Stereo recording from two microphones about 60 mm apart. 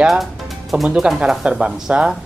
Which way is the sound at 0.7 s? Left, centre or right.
Right.